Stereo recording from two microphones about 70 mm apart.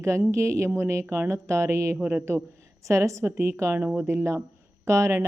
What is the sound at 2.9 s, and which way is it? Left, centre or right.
A woman's voice, right.